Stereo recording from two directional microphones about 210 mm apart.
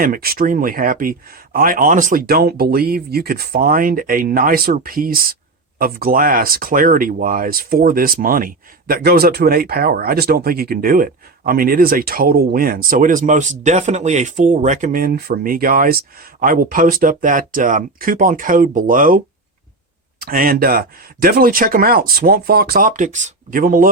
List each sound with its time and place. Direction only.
0.0 s speech: 45° right (ahead or behind)